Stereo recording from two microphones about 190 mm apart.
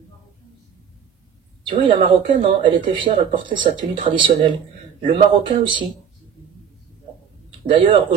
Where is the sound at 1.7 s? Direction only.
30° right (ahead or behind).